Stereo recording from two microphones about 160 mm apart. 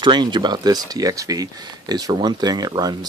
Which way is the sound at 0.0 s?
30° right (ahead or behind).